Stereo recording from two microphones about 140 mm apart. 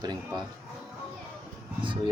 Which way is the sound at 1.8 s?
35° right (ahead or behind).